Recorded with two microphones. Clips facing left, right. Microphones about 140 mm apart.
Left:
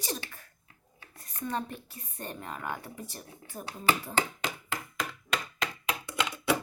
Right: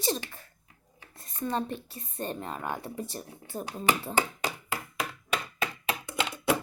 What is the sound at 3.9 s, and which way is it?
Speech, 15° right (ahead or behind).